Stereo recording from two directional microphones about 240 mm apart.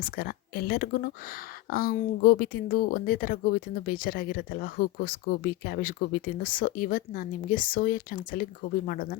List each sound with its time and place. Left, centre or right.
0.0 s speech: left